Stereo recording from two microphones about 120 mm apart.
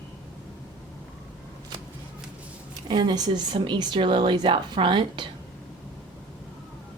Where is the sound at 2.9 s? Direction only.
40° right (ahead or behind).